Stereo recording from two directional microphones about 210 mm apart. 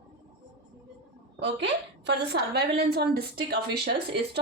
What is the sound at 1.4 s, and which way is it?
A woman's voice, 55° right (ahead or behind).